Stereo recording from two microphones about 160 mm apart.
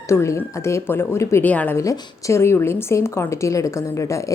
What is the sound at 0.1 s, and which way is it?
Speech, 15° left (ahead or behind).